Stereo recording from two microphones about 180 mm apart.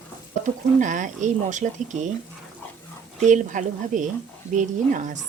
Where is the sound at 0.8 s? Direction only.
45° right (ahead or behind).